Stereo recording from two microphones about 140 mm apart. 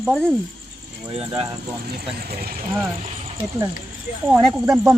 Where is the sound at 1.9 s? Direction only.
90° right.